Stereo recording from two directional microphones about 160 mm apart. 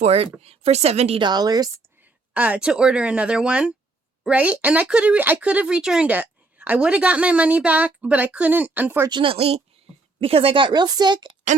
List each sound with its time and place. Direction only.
0.0 s speech: 40° right (ahead or behind)
1.3 s a woman's voice: 25° right (ahead or behind)
2.3 s a woman's voice: 10° right (ahead or behind)
9.0 s a woman's voice: 30° right (ahead or behind)